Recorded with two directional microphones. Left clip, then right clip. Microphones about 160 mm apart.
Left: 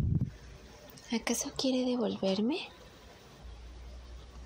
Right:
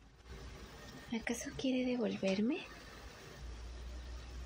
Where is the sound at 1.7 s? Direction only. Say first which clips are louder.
Left 4 dB; 35° left (ahead or behind).